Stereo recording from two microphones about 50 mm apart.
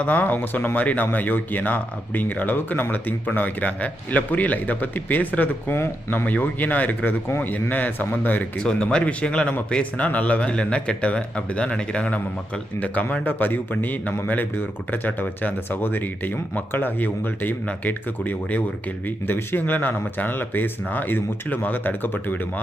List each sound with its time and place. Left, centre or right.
0.0 s speech: left
8.5 s speech: centre; by 22.6 s left